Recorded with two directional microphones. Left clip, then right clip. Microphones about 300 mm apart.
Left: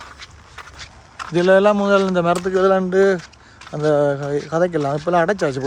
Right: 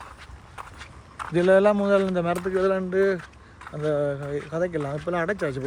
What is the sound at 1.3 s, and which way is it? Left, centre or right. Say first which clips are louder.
Speech: left 5 dB; centre.